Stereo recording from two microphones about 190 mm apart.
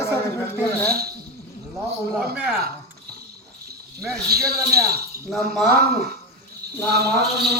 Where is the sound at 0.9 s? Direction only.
55° right (ahead or behind).